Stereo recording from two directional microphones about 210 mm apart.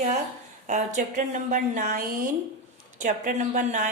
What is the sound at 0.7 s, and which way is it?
Speech, 35° right (ahead or behind).